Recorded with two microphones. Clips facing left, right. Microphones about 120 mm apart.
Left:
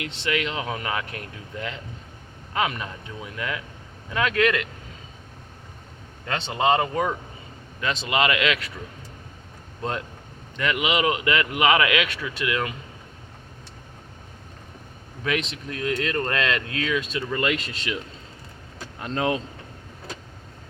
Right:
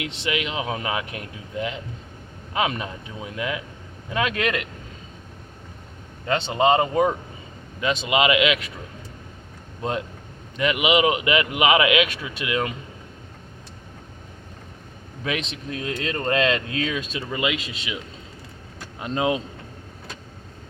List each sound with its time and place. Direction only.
0.0 s speech: 15° right (ahead or behind)
6.2 s speech: 25° right (ahead or behind)
10.6 s speech: 20° right (ahead or behind)
15.2 s speech: 20° right (ahead or behind)
17.4 s speech: 5° right (ahead or behind)